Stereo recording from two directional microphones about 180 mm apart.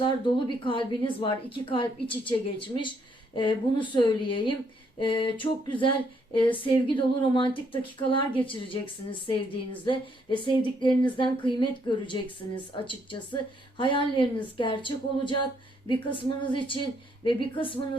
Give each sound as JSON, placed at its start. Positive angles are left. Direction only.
{"t": 0.0, "sound": "a woman's voice", "side_deg": 30}
{"t": 9.8, "sound": "a woman's voice", "side_deg": 25}